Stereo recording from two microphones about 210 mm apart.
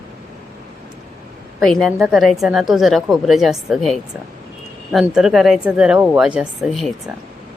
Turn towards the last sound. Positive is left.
turn(degrees=0)  # may be behind; listen again after turning